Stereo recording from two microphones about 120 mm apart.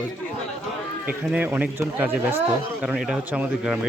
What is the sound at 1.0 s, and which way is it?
Speech, 10° right (ahead or behind).